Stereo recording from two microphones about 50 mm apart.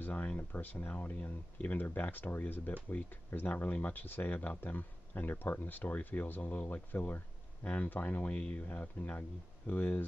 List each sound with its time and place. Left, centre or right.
0.0 s speech: left
8.6 s speech: left